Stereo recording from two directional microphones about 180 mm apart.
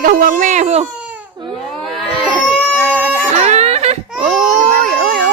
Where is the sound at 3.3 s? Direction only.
35° right (ahead or behind).